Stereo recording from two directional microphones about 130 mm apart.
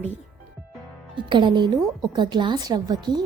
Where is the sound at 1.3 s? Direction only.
40° right (ahead or behind).